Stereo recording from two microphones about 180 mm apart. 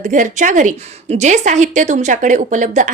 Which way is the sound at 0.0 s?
45° right (ahead or behind).